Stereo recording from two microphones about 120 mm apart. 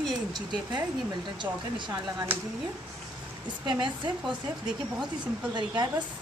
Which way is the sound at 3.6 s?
40° right (ahead or behind).